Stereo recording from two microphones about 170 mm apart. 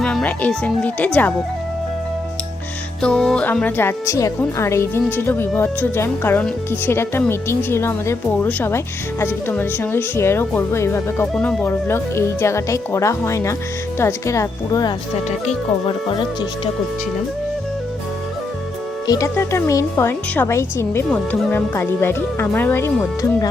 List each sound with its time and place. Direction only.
0.0 s speech: 5° left (ahead or behind)
3.0 s speech: 5° left (ahead or behind); by 14.9 s 20° left (ahead or behind)
15.4 s speech: 30° left (ahead or behind)
19.0 s speech: 20° left (ahead or behind)